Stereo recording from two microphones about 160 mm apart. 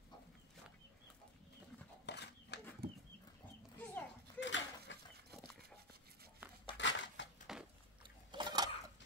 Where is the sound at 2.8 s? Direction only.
75° right (ahead or behind).